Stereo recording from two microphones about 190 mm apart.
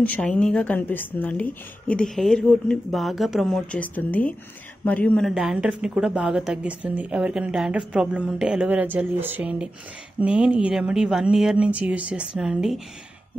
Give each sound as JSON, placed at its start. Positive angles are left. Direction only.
{"t": 0.0, "sound": "speech", "side_deg": 10}